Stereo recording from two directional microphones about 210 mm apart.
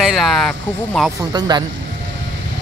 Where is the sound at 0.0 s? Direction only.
Centre (ahead or behind).